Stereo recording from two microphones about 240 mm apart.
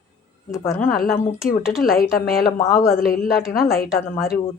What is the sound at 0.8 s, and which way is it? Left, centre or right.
Speech, left.